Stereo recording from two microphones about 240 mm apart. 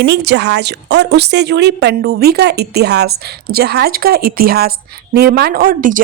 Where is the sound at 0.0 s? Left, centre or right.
Right.